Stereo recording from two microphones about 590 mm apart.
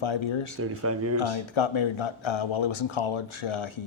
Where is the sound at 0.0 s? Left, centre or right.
Left.